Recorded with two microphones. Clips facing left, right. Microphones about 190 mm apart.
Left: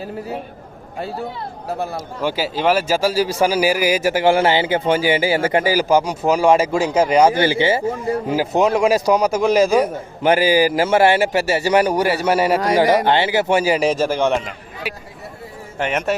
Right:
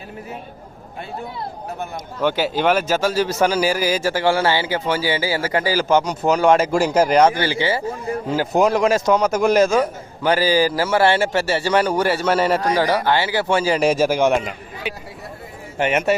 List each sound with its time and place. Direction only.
2.2 s speech: 5° left (ahead or behind)
7.3 s speech: 15° left (ahead or behind)
8.5 s speech: centre (ahead or behind)
9.6 s speech: 15° left (ahead or behind)
13.7 s a man's voice: centre (ahead or behind)